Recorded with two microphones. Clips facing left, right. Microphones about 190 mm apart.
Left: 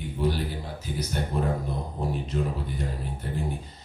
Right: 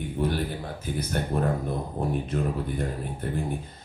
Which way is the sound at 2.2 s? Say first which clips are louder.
Right 2 dB; 55° right (ahead or behind).